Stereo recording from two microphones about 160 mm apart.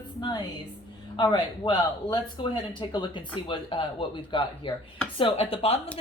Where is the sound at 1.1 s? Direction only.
30° left (ahead or behind).